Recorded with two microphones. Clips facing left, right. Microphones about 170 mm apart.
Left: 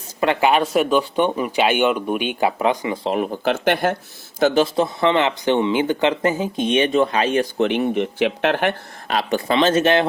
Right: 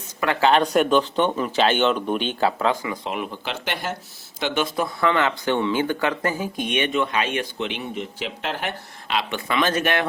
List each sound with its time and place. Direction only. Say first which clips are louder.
0.2 s speech: left 2 dB; 20° left (ahead or behind); by 3.9 s 55° left (ahead or behind)
4.4 s speech: left 8 dB; 45° left (ahead or behind)
4.6 s speech: left 4 dB; 25° left (ahead or behind); by 8.7 s 65° left (ahead or behind)
9.0 s speech: left 5 dB; 40° left (ahead or behind)